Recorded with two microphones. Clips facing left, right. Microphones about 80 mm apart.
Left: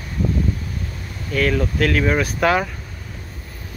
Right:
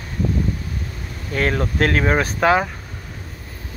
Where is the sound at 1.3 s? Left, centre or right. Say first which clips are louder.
Left 1 dB; right.